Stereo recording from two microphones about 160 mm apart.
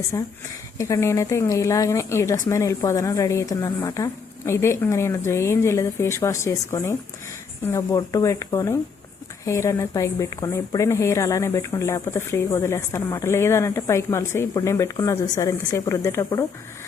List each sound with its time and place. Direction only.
0.1 s a woman's voice: 20° left (ahead or behind)